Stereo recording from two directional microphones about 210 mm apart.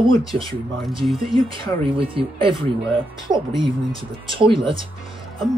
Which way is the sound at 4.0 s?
25° right (ahead or behind).